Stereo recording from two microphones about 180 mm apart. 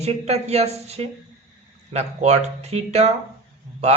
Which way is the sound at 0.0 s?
35° right (ahead or behind).